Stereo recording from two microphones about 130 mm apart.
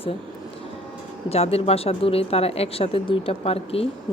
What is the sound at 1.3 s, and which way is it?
A woman's voice, 50° left (ahead or behind).